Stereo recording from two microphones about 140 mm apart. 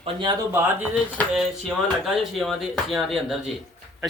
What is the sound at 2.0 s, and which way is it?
A man's voice, centre (ahead or behind).